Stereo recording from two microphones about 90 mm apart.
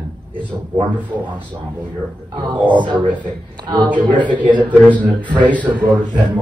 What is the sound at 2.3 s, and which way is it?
A man's voice, 60° right (ahead or behind).